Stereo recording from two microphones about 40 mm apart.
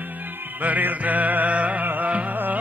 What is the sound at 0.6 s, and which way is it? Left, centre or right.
Music, right.